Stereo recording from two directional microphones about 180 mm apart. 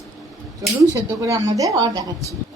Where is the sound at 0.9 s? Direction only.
20° right (ahead or behind).